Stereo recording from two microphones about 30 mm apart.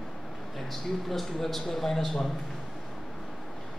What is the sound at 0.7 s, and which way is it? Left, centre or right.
Speech, centre.